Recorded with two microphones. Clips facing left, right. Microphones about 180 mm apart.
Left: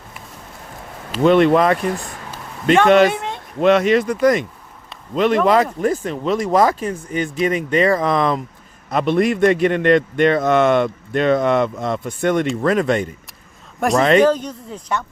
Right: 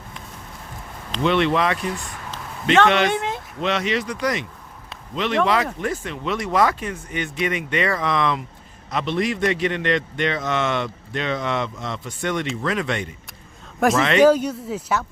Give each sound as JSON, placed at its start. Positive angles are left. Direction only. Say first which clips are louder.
{"t": 1.2, "sound": "a man's voice", "louder": "left 7 dB", "side_deg": 45}
{"t": 3.1, "sound": "speech", "louder": "right 1 dB", "side_deg": 0}
{"t": 3.6, "sound": "a man's voice", "louder": "left 10 dB", "side_deg": 50}
{"t": 14.2, "sound": "speech", "louder": "even", "side_deg": -10}